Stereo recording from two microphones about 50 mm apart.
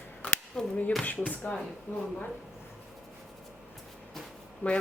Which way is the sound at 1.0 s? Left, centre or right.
Left.